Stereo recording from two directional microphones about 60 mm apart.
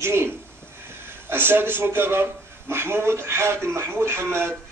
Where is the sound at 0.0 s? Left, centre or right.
Right.